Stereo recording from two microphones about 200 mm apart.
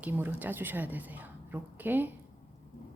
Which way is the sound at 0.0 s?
10° right (ahead or behind).